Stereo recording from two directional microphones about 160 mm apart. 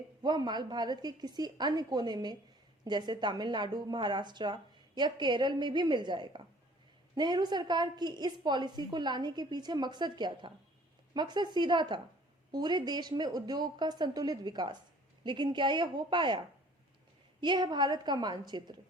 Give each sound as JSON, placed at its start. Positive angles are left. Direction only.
{"t": 0.2, "sound": "a woman's voice", "side_deg": -25}
{"t": 17.4, "sound": "a woman's voice", "side_deg": -30}